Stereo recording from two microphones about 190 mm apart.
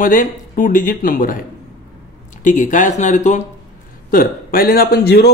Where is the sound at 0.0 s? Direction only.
45° left (ahead or behind).